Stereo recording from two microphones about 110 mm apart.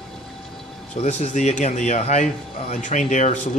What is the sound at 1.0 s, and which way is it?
Speech, 90° left.